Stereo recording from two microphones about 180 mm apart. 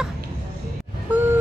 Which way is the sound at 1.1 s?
10° right (ahead or behind).